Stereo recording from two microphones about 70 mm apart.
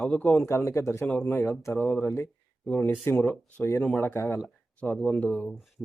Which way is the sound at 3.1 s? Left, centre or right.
Left.